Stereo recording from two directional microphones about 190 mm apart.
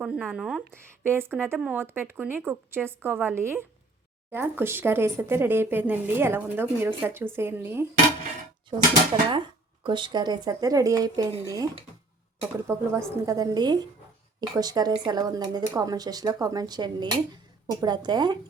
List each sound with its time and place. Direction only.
0.0 s speech: centre (ahead or behind)
0.7 s speech: 10° right (ahead or behind)
9.8 s speech: 25° right (ahead or behind)